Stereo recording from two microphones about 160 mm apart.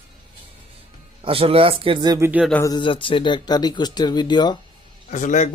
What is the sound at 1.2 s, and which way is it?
A man's voice, 35° right (ahead or behind).